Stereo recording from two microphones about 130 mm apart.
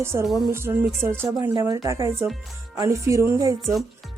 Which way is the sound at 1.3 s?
30° right (ahead or behind).